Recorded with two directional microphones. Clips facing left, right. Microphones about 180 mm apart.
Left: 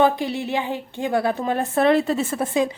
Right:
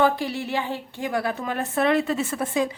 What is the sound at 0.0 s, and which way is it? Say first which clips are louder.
Speech: left 3 dB; 20° left (ahead or behind).